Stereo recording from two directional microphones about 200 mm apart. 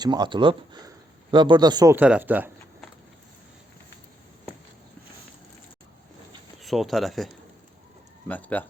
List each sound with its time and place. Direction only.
0.0 s speech: 20° right (ahead or behind)
2.0 s speech: 5° right (ahead or behind)
6.6 s speech: centre (ahead or behind)
8.3 s speech: 10° left (ahead or behind)